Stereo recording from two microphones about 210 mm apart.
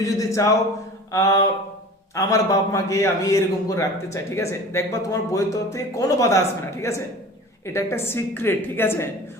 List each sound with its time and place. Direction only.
0.0 s a man's voice: 15° left (ahead or behind)